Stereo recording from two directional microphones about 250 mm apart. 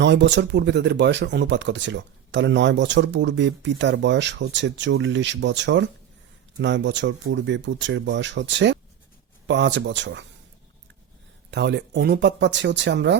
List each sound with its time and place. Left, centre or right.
0.0 s speech: right
11.5 s speech: right